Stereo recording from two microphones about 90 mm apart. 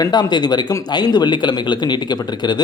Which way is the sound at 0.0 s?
50° left (ahead or behind).